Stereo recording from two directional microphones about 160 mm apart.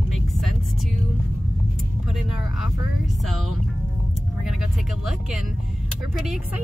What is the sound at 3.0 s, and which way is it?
Music, centre (ahead or behind).